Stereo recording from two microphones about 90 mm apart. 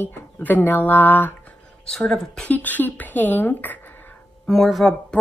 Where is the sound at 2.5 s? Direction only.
20° left (ahead or behind).